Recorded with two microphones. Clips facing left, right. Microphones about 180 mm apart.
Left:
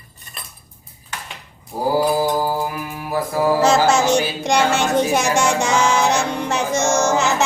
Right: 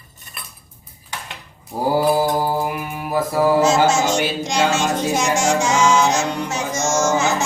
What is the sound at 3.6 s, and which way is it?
Mantra, 60° left (ahead or behind).